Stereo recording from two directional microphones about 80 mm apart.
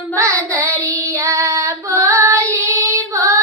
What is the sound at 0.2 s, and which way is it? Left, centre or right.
Child singing, right.